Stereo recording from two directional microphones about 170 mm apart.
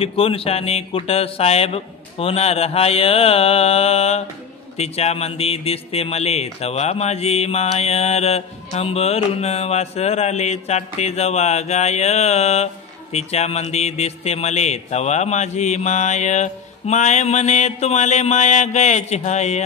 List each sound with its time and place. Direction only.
0.0 s speech: 35° left (ahead or behind)